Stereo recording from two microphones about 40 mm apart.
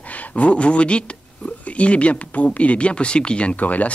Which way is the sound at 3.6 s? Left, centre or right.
Left.